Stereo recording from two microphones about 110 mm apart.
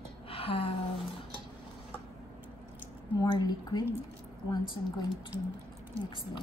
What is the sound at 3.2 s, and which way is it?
Speech, 40° left (ahead or behind).